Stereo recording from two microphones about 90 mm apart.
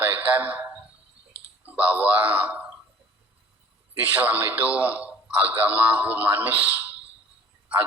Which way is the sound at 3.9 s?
25° right (ahead or behind).